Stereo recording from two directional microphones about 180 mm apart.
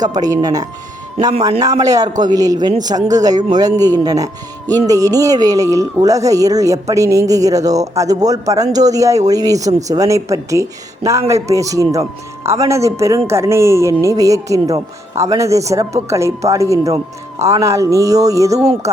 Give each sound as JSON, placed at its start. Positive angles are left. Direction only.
{"t": 0.0, "sound": "speech", "side_deg": -20}
{"t": 1.8, "sound": "speech", "side_deg": -20}